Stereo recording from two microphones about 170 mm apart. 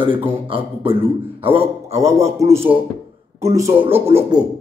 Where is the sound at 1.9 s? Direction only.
15° right (ahead or behind).